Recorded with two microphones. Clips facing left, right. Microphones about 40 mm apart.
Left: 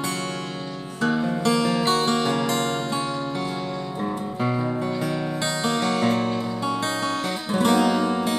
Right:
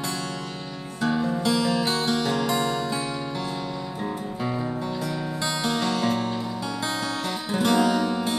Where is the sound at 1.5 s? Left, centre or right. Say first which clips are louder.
Left 2 dB; left.